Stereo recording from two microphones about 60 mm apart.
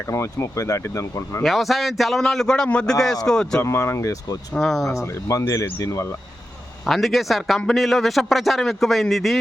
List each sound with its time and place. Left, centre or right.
0.1 s speech: left
1.5 s a man's voice: centre
3.6 s speech: left
4.5 s a man's voice: centre
4.9 s speech: left
6.8 s a man's voice: centre